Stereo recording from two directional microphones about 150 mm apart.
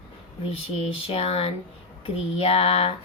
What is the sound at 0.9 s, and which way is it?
A woman's voice, 40° left (ahead or behind).